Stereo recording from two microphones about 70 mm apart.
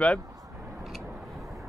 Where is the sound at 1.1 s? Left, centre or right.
Centre.